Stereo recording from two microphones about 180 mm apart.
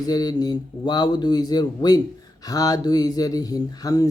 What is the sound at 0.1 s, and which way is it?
Speech, 20° left (ahead or behind).